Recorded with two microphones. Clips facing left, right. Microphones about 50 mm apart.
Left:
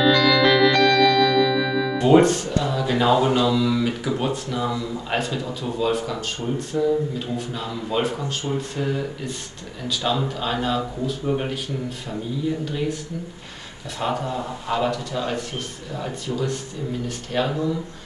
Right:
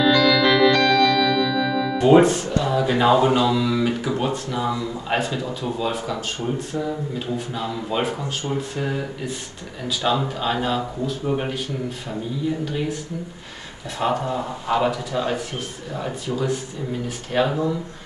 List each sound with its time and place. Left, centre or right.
0.0 s music: centre
2.0 s speech: centre
12.7 s speech: centre